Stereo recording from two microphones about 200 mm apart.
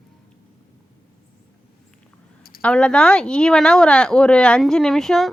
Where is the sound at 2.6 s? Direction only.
5° left (ahead or behind).